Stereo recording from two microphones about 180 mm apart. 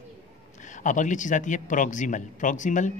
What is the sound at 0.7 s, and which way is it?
Speech, 45° left (ahead or behind).